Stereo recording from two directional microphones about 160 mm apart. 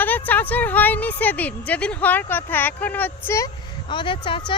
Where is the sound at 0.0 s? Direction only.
10° left (ahead or behind).